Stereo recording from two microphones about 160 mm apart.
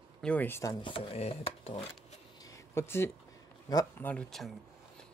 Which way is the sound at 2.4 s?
20° left (ahead or behind).